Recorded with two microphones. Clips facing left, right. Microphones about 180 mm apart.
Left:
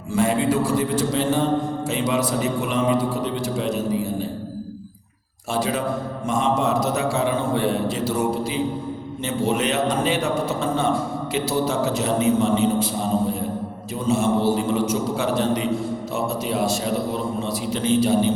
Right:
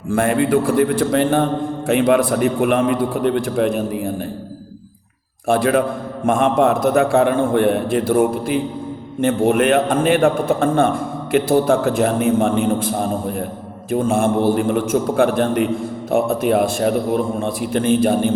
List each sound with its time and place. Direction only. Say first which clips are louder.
0.1 s a man's voice: right 4 dB; 55° right (ahead or behind)
5.5 s a man's voice: right 7 dB; 55° right (ahead or behind)